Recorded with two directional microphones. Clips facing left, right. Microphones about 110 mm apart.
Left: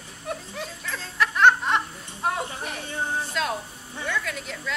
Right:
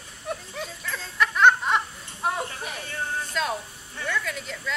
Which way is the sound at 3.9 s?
10° left (ahead or behind).